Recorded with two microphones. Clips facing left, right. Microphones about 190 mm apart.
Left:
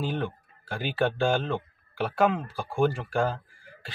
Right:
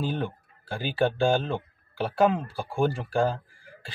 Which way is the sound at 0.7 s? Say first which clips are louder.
Right 1 dB; 30° right (ahead or behind).